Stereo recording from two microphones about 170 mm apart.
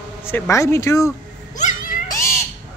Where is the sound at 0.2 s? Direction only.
15° left (ahead or behind).